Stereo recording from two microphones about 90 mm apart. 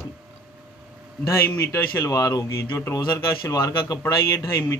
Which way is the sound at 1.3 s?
30° left (ahead or behind).